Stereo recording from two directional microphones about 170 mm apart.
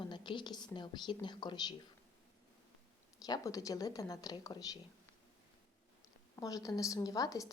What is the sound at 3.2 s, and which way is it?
A woman's voice, 20° left (ahead or behind).